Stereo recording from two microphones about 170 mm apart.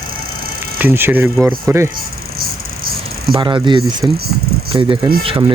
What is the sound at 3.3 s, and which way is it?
Speech, 30° right (ahead or behind).